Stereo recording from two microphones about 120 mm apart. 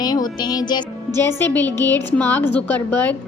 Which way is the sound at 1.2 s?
20° left (ahead or behind).